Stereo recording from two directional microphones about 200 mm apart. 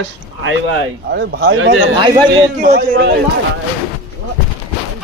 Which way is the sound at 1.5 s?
75° right (ahead or behind).